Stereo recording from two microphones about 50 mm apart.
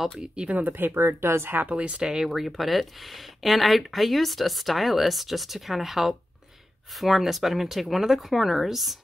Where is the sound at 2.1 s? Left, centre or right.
Centre.